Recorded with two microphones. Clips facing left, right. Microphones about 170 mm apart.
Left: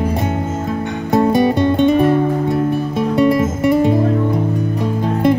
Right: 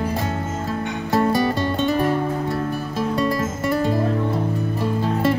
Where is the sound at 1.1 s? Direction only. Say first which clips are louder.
Left 6 dB; 20° left (ahead or behind).